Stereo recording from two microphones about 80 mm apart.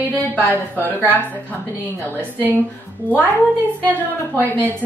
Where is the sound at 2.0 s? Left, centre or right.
Right.